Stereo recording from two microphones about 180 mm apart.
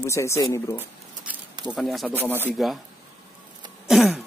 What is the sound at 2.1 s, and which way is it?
Speech, 10° right (ahead or behind).